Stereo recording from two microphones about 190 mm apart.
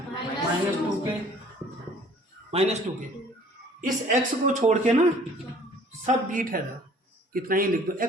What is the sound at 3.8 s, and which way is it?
Speech, 45° right (ahead or behind).